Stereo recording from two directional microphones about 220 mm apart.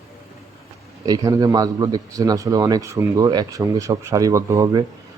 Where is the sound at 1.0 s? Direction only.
15° right (ahead or behind).